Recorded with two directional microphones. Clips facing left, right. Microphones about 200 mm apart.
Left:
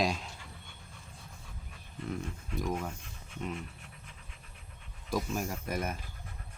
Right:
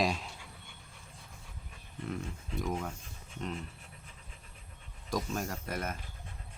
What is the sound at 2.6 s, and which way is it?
Speech, centre (ahead or behind).